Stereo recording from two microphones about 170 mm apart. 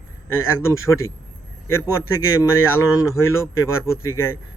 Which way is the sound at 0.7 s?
15° left (ahead or behind).